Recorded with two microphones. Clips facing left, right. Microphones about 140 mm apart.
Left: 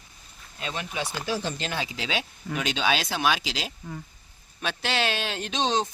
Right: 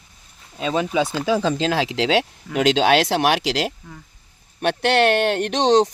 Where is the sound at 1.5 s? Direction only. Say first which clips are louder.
Right 11 dB; 90° right.